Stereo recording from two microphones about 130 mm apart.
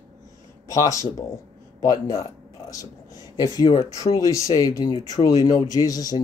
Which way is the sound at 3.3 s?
30° left (ahead or behind).